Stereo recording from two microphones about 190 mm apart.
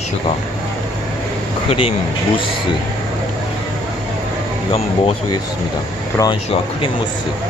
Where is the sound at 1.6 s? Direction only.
30° left (ahead or behind).